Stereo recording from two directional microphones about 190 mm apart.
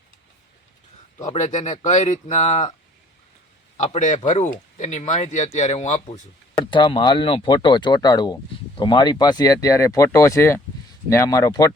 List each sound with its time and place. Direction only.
1.2 s speech: 40° left (ahead or behind)
3.8 s speech: 35° left (ahead or behind)
6.7 s speech: 25° left (ahead or behind)